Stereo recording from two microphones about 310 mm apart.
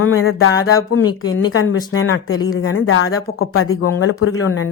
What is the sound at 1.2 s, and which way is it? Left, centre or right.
Speech, left.